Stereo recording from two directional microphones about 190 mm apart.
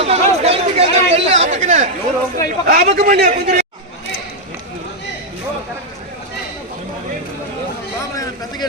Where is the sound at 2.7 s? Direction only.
45° right (ahead or behind).